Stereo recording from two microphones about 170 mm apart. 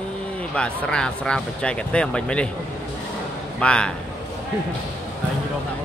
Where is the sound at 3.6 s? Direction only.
5° left (ahead or behind).